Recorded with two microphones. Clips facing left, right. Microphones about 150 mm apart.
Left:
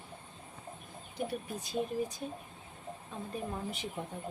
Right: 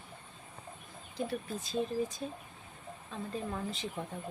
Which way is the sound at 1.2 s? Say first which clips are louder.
Right 1 dB; 15° left (ahead or behind).